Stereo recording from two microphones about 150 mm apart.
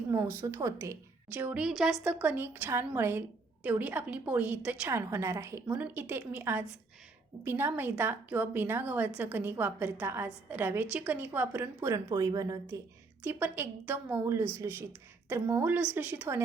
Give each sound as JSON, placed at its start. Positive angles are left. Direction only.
{"t": 0.1, "sound": "a woman's voice", "side_deg": -15}
{"t": 13.2, "sound": "a woman's voice", "side_deg": -10}